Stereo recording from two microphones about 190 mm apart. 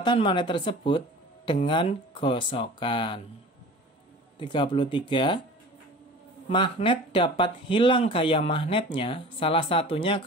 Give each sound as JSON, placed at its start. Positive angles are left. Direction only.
{"t": 0.0, "sound": "speech", "side_deg": 25}
{"t": 4.4, "sound": "speech", "side_deg": 25}
{"t": 6.5, "sound": "speech", "side_deg": 25}